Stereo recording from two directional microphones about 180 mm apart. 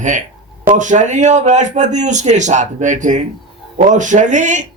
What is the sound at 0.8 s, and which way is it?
A man's voice, 45° right (ahead or behind).